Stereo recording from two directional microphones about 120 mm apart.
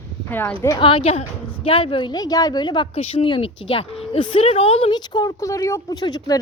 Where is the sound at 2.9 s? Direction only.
55° left (ahead or behind).